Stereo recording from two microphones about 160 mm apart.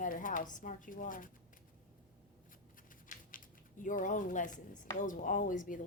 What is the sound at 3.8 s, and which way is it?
Speech, 55° left (ahead or behind).